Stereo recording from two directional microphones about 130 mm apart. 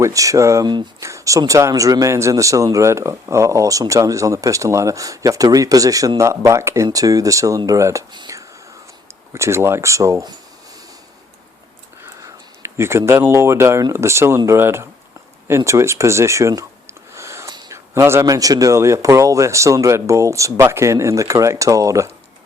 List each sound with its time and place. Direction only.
0.0 s speech: 25° right (ahead or behind)
8.1 s whispering: 30° right (ahead or behind)
9.3 s speech: 20° right (ahead or behind)
12.0 s a sound: 20° right (ahead or behind)
13.9 s speech: 20° right (ahead or behind)
17.2 s a sound: 20° right (ahead or behind)
17.5 s speech: 30° right (ahead or behind)